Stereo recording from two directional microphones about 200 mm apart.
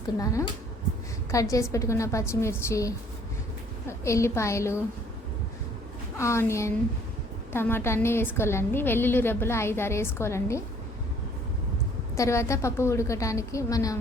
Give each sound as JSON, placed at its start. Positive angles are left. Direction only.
{"t": 1.3, "sound": "a woman's voice", "side_deg": 15}
{"t": 6.1, "sound": "a woman's voice", "side_deg": 15}
{"t": 12.1, "sound": "a woman's voice", "side_deg": 15}